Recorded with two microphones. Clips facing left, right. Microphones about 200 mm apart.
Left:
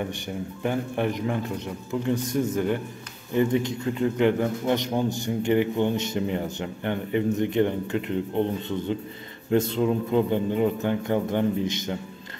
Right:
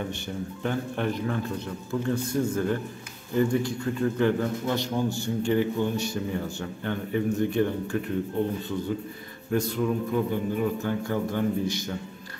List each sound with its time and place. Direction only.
0.7 s a man's voice: 15° left (ahead or behind)
9.5 s a man's voice: 25° left (ahead or behind)